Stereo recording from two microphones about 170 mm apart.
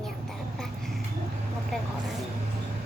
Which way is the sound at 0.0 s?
Centre (ahead or behind).